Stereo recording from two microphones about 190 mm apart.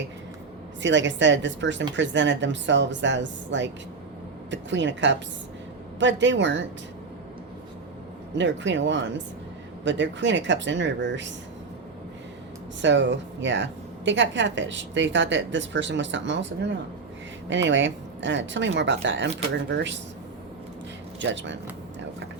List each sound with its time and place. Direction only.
0.8 s a woman's voice: 70° right (ahead or behind)
8.4 s a woman's voice: 70° right (ahead or behind)
12.8 s a woman's voice: 70° right (ahead or behind)
21.2 s a woman's voice: 70° right (ahead or behind)